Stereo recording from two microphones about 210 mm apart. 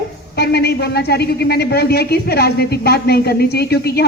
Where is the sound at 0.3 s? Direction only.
50° left (ahead or behind).